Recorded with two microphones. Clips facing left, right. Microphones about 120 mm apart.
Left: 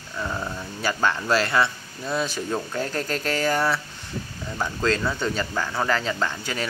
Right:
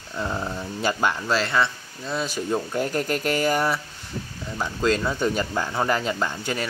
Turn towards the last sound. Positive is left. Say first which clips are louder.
# right 1 dB
turn(degrees=-10)  # may be behind; listen again after turning